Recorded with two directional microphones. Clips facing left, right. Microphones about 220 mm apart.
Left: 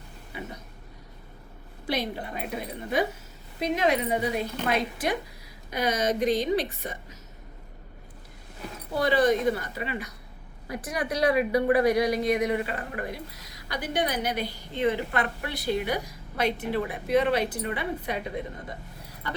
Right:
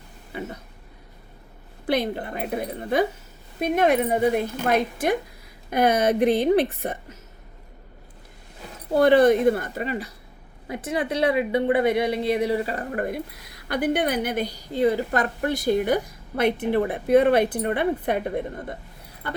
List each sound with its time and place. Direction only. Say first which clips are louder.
1.9 s a woman's voice: right 6 dB; 55° right (ahead or behind)
9.0 s a woman's voice: right 7 dB; 55° right (ahead or behind)
10.7 s a woman's voice: right 4 dB; 25° right (ahead or behind); by 18.8 s 55° right (ahead or behind)